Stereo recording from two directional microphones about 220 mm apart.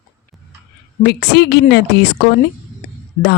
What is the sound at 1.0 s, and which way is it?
Speech, 50° left (ahead or behind).